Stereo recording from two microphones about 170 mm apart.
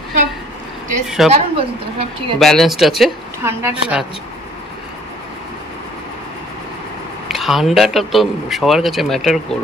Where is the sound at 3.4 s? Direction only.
15° right (ahead or behind).